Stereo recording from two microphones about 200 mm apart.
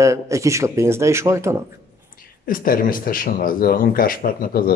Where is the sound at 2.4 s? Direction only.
45° left (ahead or behind).